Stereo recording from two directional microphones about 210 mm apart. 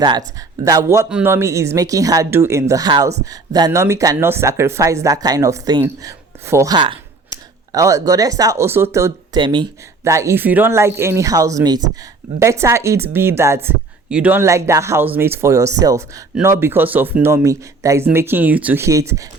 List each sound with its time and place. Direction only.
0.0 s a woman's voice: 20° right (ahead or behind)